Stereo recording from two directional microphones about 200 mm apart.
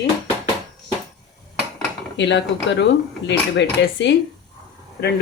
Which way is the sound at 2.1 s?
60° left (ahead or behind).